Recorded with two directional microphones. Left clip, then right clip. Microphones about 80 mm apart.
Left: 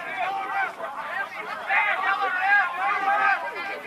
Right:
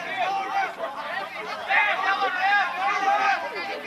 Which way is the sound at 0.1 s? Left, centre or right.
Right.